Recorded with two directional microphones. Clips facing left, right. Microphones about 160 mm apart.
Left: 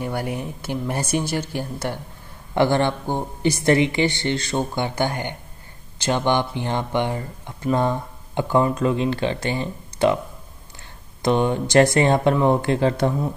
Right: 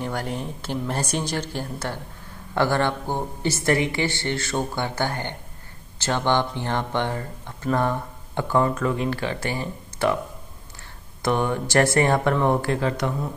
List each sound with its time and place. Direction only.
0.0 s speech: 10° left (ahead or behind)
11.2 s speech: 20° left (ahead or behind)
12.7 s speech: 30° left (ahead or behind)